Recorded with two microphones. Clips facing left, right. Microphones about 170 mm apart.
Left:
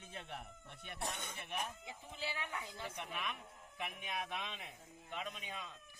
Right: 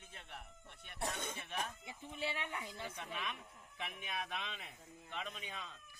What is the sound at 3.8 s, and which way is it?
A man's voice, 15° left (ahead or behind).